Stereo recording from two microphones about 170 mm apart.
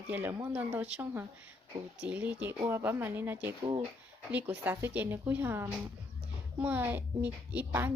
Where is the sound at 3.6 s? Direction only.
25° right (ahead or behind).